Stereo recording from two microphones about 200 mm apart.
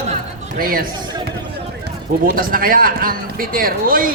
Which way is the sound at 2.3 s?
45° right (ahead or behind).